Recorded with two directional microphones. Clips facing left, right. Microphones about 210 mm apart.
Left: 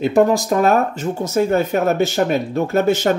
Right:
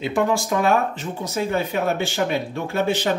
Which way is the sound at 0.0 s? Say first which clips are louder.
Left 7 dB; 40° left (ahead or behind).